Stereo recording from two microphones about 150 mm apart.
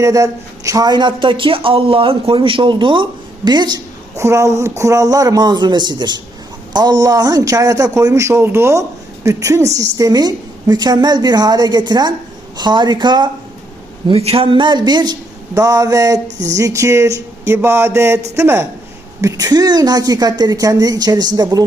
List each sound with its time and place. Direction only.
0.0 s a woman's voice: 20° right (ahead or behind)
14.1 s a woman's voice: 40° right (ahead or behind)